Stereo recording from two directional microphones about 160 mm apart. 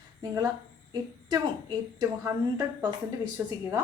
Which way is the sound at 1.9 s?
25° right (ahead or behind).